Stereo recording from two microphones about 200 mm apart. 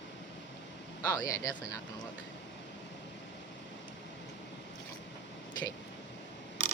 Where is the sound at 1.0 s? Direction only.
20° left (ahead or behind).